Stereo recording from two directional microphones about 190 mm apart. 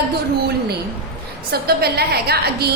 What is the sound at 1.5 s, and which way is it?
A woman's voice, 55° right (ahead or behind).